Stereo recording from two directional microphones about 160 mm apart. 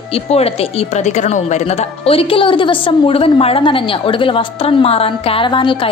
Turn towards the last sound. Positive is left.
turn(degrees=30)  # may be behind; listen again after turning